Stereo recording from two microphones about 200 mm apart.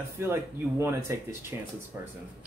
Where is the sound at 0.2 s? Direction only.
15° right (ahead or behind).